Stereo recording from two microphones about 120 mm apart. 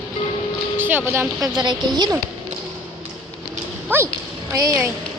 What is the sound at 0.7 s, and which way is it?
Speech, 15° right (ahead or behind).